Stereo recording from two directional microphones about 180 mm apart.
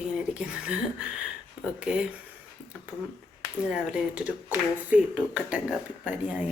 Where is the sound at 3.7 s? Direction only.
5° right (ahead or behind).